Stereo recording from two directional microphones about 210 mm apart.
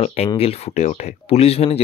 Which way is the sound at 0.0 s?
30° left (ahead or behind).